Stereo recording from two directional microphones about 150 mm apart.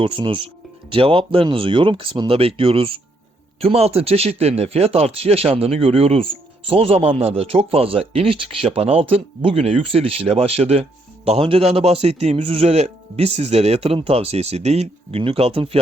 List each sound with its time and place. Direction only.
0.0 s a man's voice: 35° right (ahead or behind)